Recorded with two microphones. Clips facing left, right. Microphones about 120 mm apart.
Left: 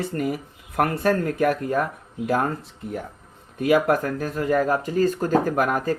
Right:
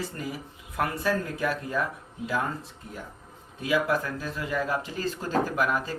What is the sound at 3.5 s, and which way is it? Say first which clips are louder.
Speech: left 7 dB; 60° left (ahead or behind).